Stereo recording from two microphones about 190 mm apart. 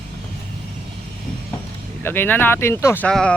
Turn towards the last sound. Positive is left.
turn(degrees=5)  # may be behind; listen again after turning